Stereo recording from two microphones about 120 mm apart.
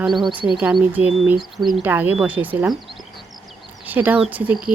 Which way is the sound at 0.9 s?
15° right (ahead or behind).